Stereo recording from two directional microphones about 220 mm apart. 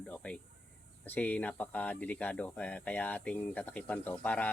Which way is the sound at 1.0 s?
5° left (ahead or behind).